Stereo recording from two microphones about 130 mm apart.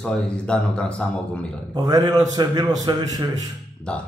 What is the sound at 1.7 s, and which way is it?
A man's voice, 30° right (ahead or behind).